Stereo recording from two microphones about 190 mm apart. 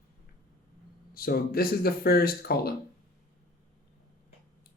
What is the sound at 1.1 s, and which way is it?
Speech, 50° left (ahead or behind).